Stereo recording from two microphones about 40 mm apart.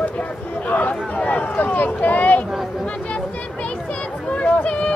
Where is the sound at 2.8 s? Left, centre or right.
Left.